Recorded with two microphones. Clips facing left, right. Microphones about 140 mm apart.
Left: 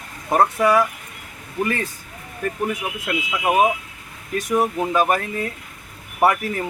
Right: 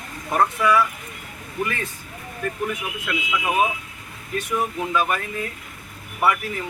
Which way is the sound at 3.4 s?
45° left (ahead or behind).